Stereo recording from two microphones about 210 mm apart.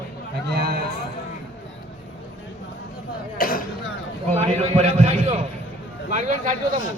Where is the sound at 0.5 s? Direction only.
45° right (ahead or behind).